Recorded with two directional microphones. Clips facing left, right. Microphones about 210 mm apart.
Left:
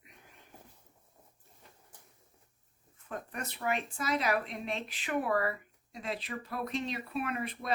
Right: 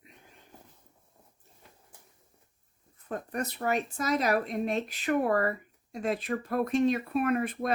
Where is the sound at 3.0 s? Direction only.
40° right (ahead or behind).